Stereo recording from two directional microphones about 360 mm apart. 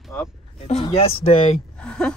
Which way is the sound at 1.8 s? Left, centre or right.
Centre.